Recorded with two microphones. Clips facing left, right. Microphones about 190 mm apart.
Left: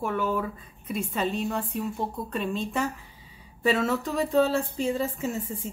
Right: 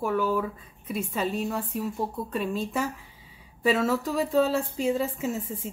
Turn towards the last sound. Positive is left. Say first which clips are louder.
# even
turn(degrees=-5)  # may be behind; listen again after turning